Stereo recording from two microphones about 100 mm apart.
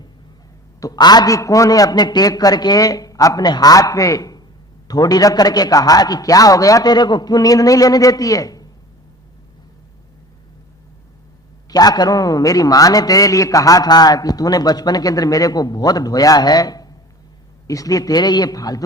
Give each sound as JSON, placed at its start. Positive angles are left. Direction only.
{"t": 0.8, "sound": "a man's voice", "side_deg": 40}
{"t": 11.7, "sound": "a man's voice", "side_deg": 40}